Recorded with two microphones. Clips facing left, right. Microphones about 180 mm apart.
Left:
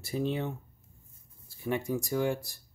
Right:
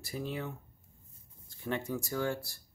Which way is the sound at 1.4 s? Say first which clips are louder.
Left 4 dB; 10° left (ahead or behind).